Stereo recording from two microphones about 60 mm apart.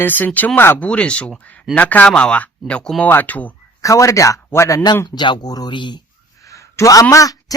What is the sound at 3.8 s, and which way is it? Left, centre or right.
Speech, left.